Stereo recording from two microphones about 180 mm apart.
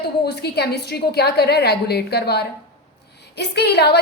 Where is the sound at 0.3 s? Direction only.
65° left (ahead or behind).